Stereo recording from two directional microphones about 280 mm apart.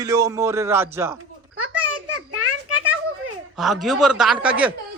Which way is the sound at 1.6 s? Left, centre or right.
Right.